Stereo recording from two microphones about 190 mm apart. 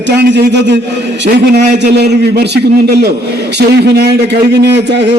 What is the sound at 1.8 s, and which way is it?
A man's voice, 60° right (ahead or behind).